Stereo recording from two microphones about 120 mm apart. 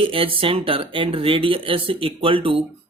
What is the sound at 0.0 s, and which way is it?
Speech, 50° right (ahead or behind).